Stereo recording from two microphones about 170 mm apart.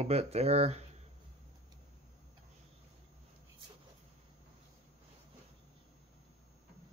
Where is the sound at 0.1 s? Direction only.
40° right (ahead or behind).